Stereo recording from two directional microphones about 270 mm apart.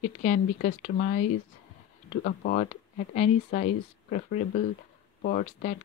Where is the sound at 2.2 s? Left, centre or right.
Left.